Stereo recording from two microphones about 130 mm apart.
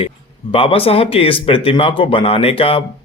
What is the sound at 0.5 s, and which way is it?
Speech, 45° left (ahead or behind).